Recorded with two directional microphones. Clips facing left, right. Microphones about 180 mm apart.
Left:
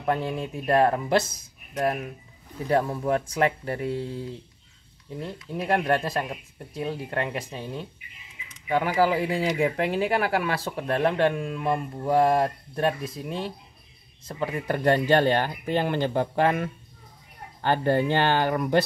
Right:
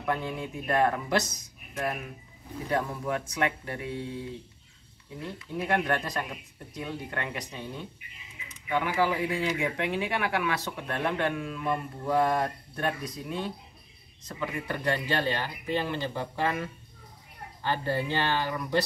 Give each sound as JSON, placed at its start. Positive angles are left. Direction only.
{"t": 0.0, "sound": "speech", "side_deg": 30}
{"t": 2.7, "sound": "speech", "side_deg": 30}
{"t": 5.7, "sound": "speech", "side_deg": 30}
{"t": 8.6, "sound": "speech", "side_deg": 40}